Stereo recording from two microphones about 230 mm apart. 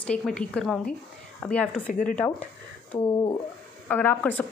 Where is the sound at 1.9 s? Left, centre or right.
Left.